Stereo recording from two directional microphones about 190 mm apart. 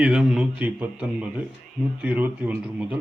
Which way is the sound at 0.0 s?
5° right (ahead or behind).